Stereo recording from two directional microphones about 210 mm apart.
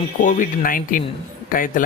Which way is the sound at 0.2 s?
40° left (ahead or behind).